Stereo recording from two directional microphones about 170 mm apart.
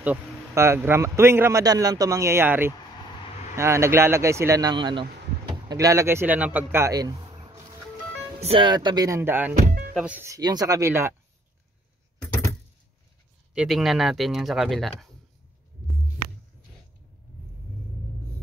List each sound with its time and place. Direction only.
0.0 s a man's voice: 10° right (ahead or behind)
8.4 s speech: 30° right (ahead or behind); by 9.5 s 15° right (ahead or behind)
9.6 s music: 55° right (ahead or behind)
9.9 s a man's voice: 10° right (ahead or behind)
13.6 s speech: centre (ahead or behind)